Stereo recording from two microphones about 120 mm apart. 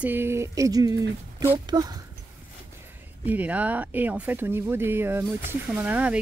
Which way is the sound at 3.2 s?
15° right (ahead or behind).